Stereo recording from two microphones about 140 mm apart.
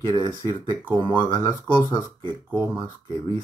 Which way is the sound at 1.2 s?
30° left (ahead or behind).